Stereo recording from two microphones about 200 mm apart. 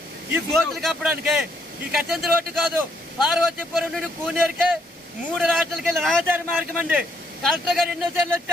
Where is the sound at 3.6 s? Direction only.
Centre (ahead or behind).